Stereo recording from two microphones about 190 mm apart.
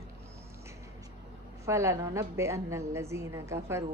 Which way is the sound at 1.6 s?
15° right (ahead or behind).